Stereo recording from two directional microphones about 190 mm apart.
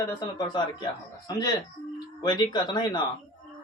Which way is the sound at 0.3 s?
25° left (ahead or behind).